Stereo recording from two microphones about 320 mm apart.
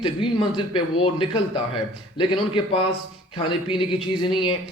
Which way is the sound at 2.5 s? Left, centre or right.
Centre.